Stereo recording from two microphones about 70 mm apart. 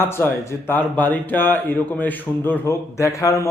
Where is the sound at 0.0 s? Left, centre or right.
Left.